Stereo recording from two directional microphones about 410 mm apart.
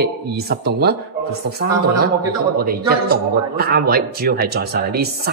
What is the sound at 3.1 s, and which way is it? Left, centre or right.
A man's voice, right.